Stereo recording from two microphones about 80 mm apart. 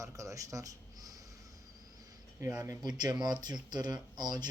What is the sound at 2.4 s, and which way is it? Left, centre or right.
Speech, right.